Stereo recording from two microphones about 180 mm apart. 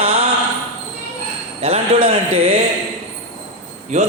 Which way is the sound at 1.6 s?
35° right (ahead or behind).